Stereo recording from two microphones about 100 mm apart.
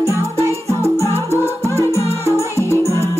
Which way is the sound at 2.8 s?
30° right (ahead or behind).